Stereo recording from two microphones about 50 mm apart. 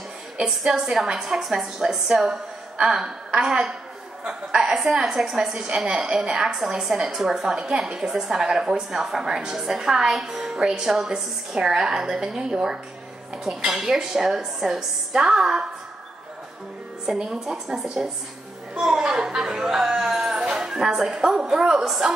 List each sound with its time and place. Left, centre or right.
0.5 s a woman's voice: centre
17.0 s a woman's voice: centre